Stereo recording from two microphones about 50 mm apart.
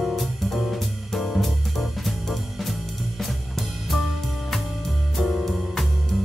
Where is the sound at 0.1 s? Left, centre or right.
Centre.